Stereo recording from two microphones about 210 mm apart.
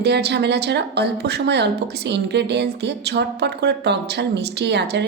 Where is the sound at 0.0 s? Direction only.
50° right (ahead or behind).